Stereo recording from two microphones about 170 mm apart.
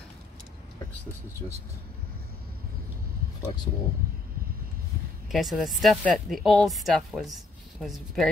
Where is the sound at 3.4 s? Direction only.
25° left (ahead or behind).